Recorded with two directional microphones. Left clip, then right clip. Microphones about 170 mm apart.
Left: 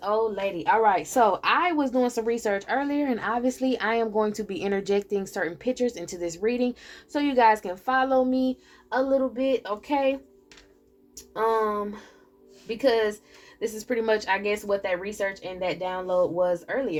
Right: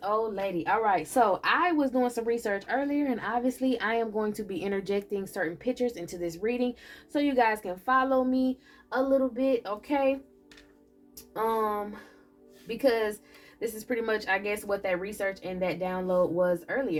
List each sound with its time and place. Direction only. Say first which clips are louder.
0.6 s a woman's voice: left 5 dB; 45° left (ahead or behind)
11.3 s speech: left 4 dB; 40° left (ahead or behind)